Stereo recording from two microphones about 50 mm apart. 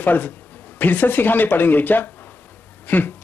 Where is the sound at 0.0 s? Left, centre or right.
Left.